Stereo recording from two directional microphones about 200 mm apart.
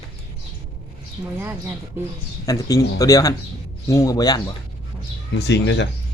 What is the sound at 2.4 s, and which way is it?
Speech, 15° left (ahead or behind).